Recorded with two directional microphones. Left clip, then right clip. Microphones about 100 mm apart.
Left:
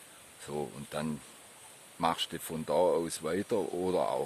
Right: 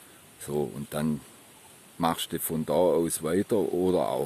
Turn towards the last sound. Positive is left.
turn(degrees=-40)  # may be behind; listen again after turning